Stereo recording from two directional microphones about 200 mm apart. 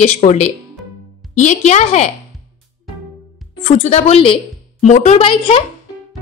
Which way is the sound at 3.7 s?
35° left (ahead or behind).